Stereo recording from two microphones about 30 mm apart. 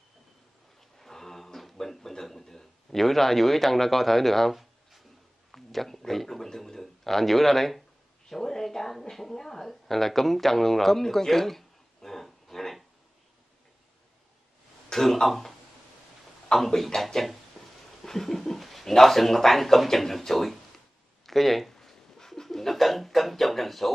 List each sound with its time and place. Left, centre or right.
0.7 s a sound: centre
5.5 s speech: centre
14.9 s speech: left
15.2 s speech: centre
16.5 s speech: centre
18.0 s a sound: centre
18.6 s speech: centre